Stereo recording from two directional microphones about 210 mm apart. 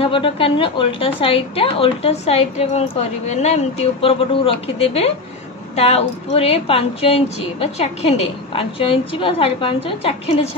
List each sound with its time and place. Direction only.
0.0 s a woman's voice: 25° left (ahead or behind)